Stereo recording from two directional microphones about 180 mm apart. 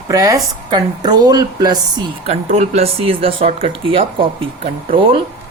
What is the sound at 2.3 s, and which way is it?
Speech, 35° right (ahead or behind).